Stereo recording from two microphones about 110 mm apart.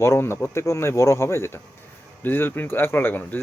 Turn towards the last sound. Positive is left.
turn(degrees=15)  # may be behind; listen again after turning